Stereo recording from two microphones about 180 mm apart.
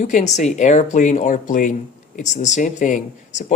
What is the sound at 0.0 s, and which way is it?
Speech, 45° left (ahead or behind).